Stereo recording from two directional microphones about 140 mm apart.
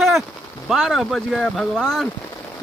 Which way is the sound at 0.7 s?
Centre (ahead or behind).